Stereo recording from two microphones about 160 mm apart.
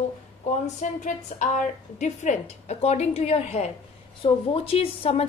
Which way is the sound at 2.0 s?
50° left (ahead or behind).